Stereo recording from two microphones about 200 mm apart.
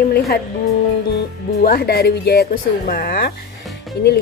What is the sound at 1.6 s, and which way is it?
A woman's voice, 50° left (ahead or behind).